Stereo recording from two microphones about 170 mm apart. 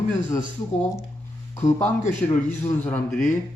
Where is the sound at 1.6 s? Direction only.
45° left (ahead or behind).